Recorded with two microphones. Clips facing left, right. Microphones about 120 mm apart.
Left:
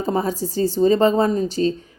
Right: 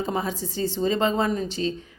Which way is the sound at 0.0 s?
40° left (ahead or behind).